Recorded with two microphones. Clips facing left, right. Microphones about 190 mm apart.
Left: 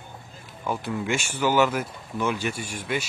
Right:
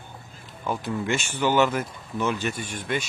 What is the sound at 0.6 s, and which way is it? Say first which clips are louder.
Speech: even; 10° left (ahead or behind).